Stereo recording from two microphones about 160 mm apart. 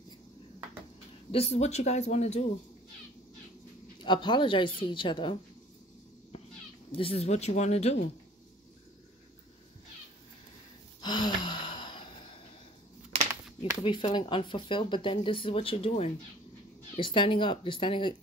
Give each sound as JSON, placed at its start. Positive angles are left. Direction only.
{"t": 1.3, "sound": "speech", "side_deg": 40}
{"t": 4.0, "sound": "speech", "side_deg": 30}
{"t": 6.9, "sound": "speech", "side_deg": 35}
{"t": 11.0, "sound": "a sound", "side_deg": 25}
{"t": 13.6, "sound": "speech", "side_deg": 35}